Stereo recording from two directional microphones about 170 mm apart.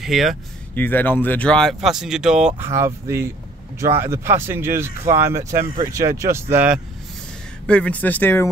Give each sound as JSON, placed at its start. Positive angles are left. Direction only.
{"t": 0.0, "sound": "speech", "side_deg": 0}
{"t": 0.7, "sound": "speech", "side_deg": 10}
{"t": 2.6, "sound": "speech", "side_deg": -15}
{"t": 7.6, "sound": "speech", "side_deg": 5}